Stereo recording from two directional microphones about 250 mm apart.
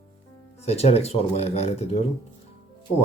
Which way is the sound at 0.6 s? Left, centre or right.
Left.